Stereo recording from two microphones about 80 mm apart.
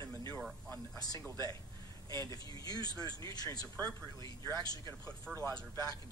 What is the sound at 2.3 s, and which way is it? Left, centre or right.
Speech, left.